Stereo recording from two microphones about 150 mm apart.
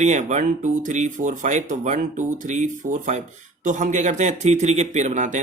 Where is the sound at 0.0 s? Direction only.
50° right (ahead or behind).